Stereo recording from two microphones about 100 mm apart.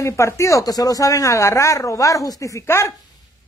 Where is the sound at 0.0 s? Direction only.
30° left (ahead or behind).